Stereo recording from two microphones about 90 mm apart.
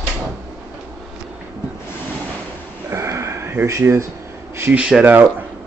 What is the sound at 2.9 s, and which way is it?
Sniff, 30° right (ahead or behind).